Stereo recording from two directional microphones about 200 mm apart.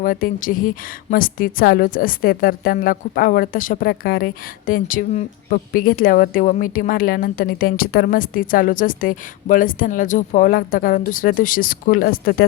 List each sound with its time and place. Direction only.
0.0 s a woman's voice: 45° left (ahead or behind)